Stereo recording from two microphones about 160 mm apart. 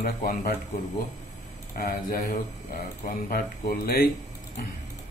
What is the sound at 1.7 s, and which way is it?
Mantra, 65° left (ahead or behind).